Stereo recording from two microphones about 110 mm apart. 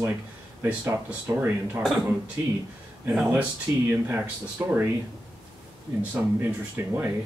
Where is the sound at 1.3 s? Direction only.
25° right (ahead or behind).